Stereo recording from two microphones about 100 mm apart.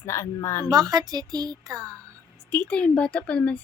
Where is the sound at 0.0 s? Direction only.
30° left (ahead or behind).